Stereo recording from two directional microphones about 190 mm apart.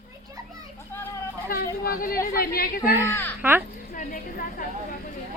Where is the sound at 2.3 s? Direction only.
50° left (ahead or behind).